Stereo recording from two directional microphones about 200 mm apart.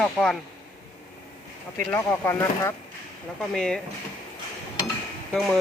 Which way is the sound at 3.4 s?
5° left (ahead or behind).